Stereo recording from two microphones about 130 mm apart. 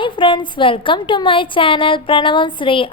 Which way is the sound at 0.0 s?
40° left (ahead or behind).